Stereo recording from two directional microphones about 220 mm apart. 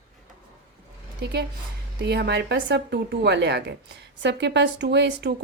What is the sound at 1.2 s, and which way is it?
Speech, 50° right (ahead or behind).